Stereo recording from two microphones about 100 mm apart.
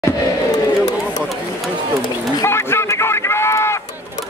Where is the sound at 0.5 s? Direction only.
40° left (ahead or behind).